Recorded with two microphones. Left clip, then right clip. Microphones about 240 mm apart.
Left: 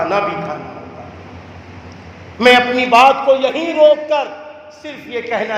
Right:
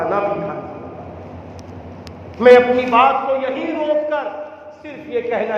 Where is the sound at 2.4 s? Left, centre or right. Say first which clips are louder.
Right 1 dB; left.